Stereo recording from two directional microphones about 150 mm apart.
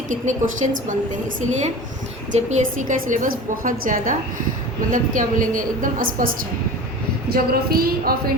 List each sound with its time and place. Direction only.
0.1 s a woman's voice: 55° right (ahead or behind)
7.3 s speech: 90° right